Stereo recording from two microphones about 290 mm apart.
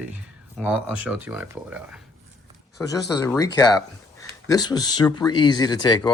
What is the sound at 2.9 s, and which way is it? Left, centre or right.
Speech, centre.